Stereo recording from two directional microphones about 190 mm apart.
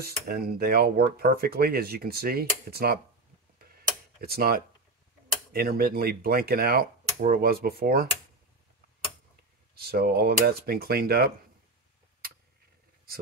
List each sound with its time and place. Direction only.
0.0 s speech: 55° right (ahead or behind)
4.2 s speech: 55° right (ahead or behind)
9.8 s speech: 55° right (ahead or behind)